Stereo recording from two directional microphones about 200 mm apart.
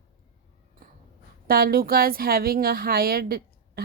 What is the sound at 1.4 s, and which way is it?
A woman's voice, 45° right (ahead or behind).